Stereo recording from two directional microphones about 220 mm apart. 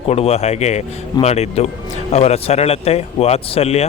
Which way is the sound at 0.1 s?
30° left (ahead or behind).